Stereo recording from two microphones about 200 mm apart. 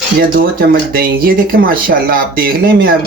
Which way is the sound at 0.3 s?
50° right (ahead or behind).